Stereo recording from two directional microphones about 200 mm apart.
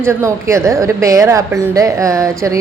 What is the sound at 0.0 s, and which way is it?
A woman's voice, 15° right (ahead or behind).